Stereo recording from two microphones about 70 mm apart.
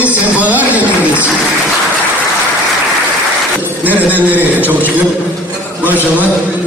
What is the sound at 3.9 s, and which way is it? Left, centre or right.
Speech, right.